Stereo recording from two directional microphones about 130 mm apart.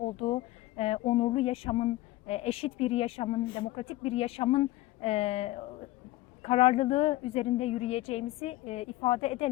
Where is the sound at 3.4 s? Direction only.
40° left (ahead or behind).